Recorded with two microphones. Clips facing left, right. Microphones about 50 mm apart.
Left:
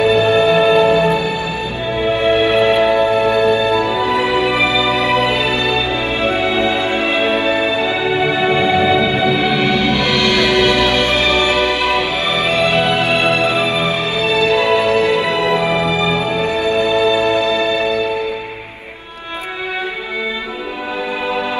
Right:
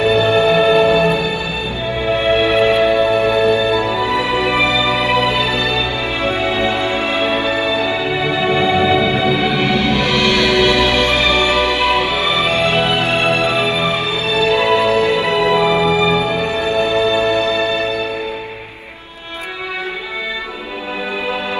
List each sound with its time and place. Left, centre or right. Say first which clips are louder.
0.3 s music: left 1 dB; left
2.1 s music: even; right
2.4 s music: even; left
11.8 s music: right 1 dB; right
12.7 s music: left 1 dB; left
13.4 s music: left 1 dB; right
13.7 s music: even; left
14.5 s music: right 2 dB; right
14.9 s music: even; left
15.8 s music: right 2 dB; right